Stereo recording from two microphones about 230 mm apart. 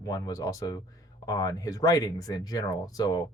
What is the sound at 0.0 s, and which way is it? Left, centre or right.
Speech, centre.